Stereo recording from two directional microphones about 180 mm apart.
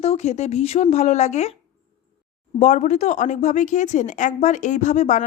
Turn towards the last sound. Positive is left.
turn(degrees=40)  # may be behind; listen again after turning